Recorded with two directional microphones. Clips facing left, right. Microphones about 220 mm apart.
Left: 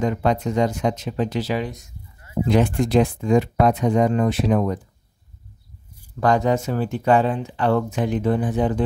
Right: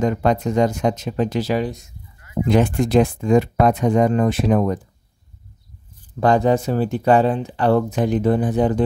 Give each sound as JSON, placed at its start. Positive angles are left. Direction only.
{"t": 0.0, "sound": "speech", "side_deg": -45}
{"t": 6.1, "sound": "speech", "side_deg": -30}